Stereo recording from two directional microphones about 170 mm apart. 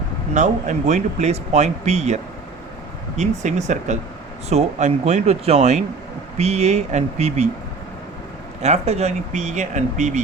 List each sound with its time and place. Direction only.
0.3 s speech: 45° right (ahead or behind)
3.2 s speech: 45° right (ahead or behind)
8.6 s speech: 40° right (ahead or behind)